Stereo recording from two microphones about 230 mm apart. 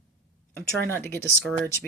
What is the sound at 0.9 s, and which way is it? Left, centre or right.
Speech, centre.